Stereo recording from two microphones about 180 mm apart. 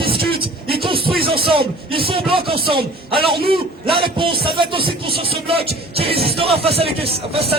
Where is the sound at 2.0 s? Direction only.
30° right (ahead or behind).